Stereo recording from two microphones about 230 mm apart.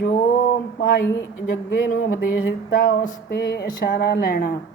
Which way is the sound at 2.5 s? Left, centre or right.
Left.